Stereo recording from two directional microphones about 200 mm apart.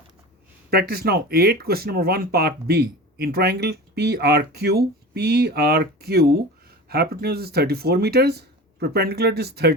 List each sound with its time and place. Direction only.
0.7 s speech: 50° right (ahead or behind)